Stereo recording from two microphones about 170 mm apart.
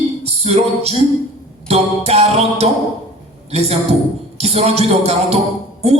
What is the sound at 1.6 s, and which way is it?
A man's voice, 35° right (ahead or behind).